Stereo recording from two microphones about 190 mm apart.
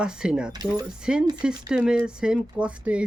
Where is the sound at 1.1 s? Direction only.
5° right (ahead or behind).